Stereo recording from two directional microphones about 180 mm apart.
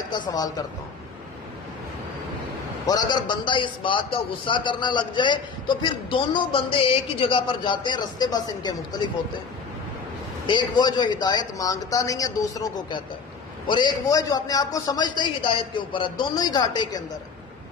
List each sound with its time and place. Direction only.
0.1 s a man's voice: 25° left (ahead or behind)
2.9 s a man's voice: 20° left (ahead or behind)
10.4 s a man's voice: 25° left (ahead or behind)